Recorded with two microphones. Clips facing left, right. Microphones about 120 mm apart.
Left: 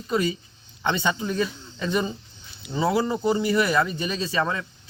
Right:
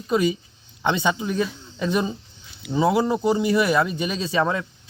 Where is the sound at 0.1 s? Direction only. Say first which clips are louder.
Right 4 dB; 15° right (ahead or behind).